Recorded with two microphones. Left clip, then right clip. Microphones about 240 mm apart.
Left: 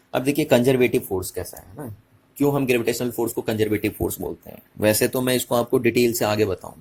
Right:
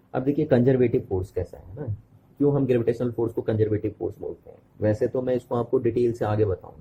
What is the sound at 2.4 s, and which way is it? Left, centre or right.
Speech, left.